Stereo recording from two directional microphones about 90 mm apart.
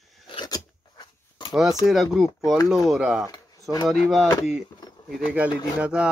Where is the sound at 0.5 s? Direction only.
45° left (ahead or behind).